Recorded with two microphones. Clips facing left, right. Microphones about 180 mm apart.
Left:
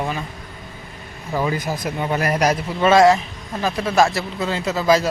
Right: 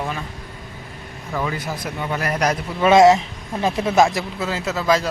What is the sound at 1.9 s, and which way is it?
Speech, 20° left (ahead or behind).